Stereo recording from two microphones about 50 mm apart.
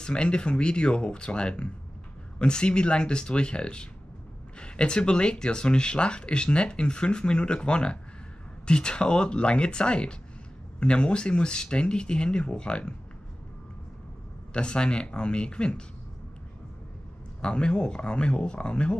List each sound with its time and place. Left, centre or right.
0.0 s speech: centre
14.5 s speech: centre
17.4 s speech: centre